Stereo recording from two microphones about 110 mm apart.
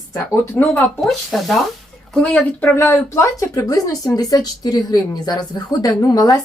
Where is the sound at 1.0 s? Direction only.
Centre (ahead or behind).